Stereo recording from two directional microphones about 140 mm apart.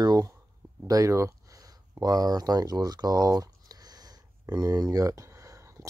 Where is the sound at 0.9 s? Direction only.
25° right (ahead or behind).